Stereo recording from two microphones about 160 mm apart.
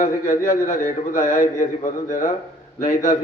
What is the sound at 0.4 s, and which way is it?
A man's voice, 55° left (ahead or behind).